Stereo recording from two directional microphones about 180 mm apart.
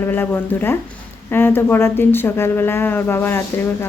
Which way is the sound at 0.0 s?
10° left (ahead or behind).